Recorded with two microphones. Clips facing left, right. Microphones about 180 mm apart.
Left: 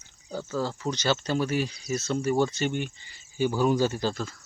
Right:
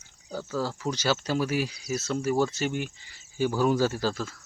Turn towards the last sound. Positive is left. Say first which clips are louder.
# even
turn(degrees=-5)  # may be behind; listen again after turning